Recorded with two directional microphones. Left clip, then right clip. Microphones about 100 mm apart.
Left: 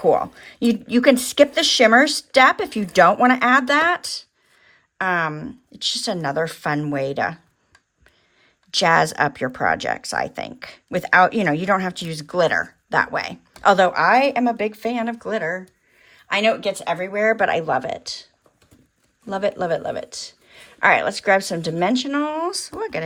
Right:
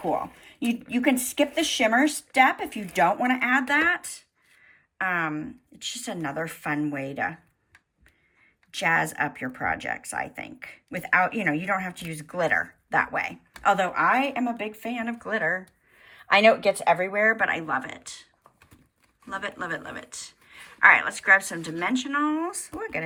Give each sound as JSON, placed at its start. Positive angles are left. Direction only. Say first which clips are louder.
{"t": 1.2, "sound": "speech", "louder": "left 9 dB", "side_deg": 90}
{"t": 3.5, "sound": "speech", "louder": "left 6 dB", "side_deg": 40}
{"t": 8.7, "sound": "speech", "louder": "left 8 dB", "side_deg": 35}
{"t": 14.5, "sound": "speech", "louder": "left 9 dB", "side_deg": 55}
{"t": 15.2, "sound": "speech", "louder": "left 3 dB", "side_deg": 10}
{"t": 16.0, "sound": "speech", "louder": "right 1 dB", "side_deg": -10}
{"t": 17.1, "sound": "speech", "louder": "left 3 dB", "side_deg": 0}
{"t": 17.3, "sound": "speech", "louder": "left 6 dB", "side_deg": 30}
{"t": 19.3, "sound": "speech", "louder": "left 10 dB", "side_deg": 25}